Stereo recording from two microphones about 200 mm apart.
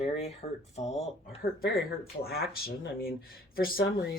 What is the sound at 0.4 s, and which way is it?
Speech, 30° left (ahead or behind).